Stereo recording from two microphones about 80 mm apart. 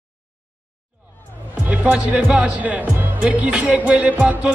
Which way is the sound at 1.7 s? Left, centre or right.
Centre.